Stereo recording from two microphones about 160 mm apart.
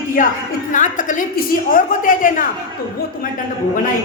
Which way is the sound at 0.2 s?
55° left (ahead or behind).